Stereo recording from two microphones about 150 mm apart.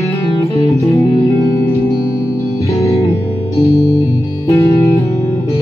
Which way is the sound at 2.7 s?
20° left (ahead or behind).